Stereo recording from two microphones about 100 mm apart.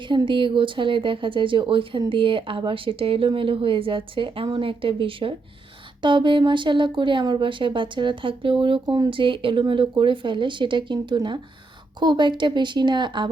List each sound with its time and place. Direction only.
0.3 s a woman's voice: 55° right (ahead or behind)